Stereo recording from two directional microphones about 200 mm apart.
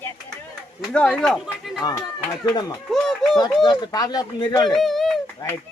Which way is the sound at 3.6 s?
20° left (ahead or behind).